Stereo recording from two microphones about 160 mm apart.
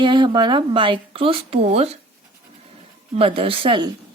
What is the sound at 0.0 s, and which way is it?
A woman's voice, 30° right (ahead or behind).